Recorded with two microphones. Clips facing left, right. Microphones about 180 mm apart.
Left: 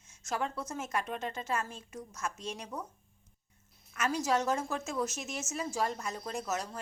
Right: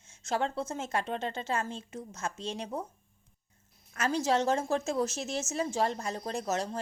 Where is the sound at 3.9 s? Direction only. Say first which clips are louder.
Right 2 dB; 30° right (ahead or behind).